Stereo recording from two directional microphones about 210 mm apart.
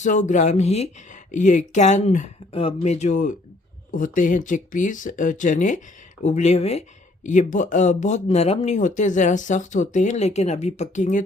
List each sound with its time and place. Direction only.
0.0 s speech: 35° left (ahead or behind)